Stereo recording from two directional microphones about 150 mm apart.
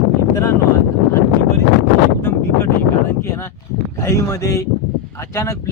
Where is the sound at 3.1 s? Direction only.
15° left (ahead or behind).